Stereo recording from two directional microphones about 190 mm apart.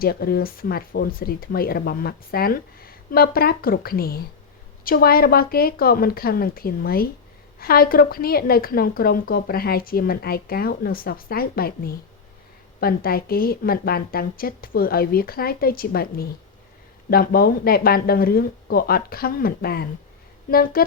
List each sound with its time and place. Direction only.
0.0 s a woman's voice: 55° left (ahead or behind)